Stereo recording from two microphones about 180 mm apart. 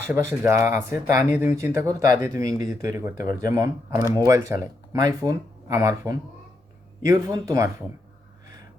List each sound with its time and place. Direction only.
0.1 s speech: 15° right (ahead or behind)